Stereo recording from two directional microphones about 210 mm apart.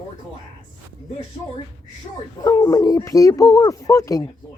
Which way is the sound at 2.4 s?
15° left (ahead or behind).